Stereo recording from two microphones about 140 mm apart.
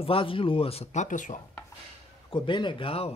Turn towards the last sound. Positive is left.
turn(degrees=40)  # may be behind; listen again after turning